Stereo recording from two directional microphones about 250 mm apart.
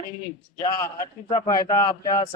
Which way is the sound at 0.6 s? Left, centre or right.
Centre.